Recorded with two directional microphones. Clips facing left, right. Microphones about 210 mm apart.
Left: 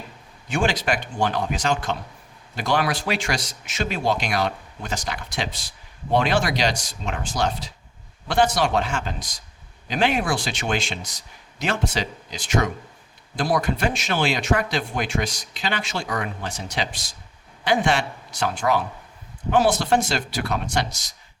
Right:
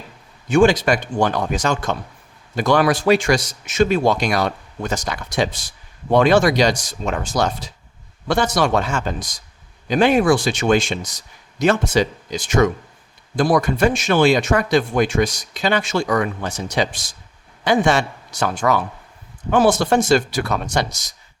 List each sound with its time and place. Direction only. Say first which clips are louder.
0.4 s speech: right 9 dB; 45° right (ahead or behind)
13.6 s speech: right 6 dB; 45° right (ahead or behind)